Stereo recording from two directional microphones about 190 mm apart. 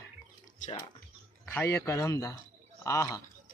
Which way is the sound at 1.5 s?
15° left (ahead or behind).